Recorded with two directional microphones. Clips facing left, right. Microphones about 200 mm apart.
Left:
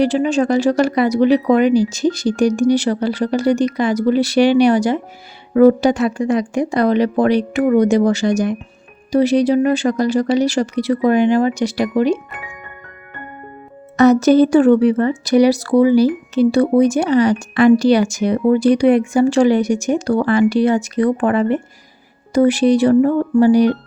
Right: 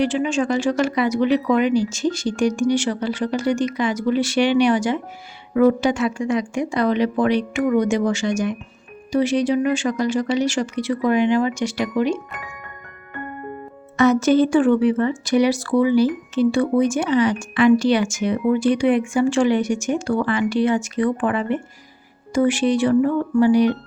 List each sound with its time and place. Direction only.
0.0 s speech: 35° left (ahead or behind)
13.9 s speech: 40° left (ahead or behind)